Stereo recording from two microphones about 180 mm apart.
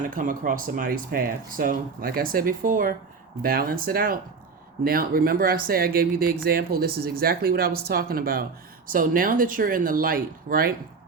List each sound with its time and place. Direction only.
0.0 s speech: 50° right (ahead or behind)